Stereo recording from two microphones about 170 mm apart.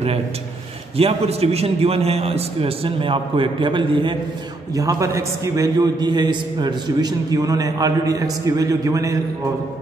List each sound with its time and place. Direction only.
0.9 s a man's voice: 35° right (ahead or behind); by 9.1 s 20° right (ahead or behind)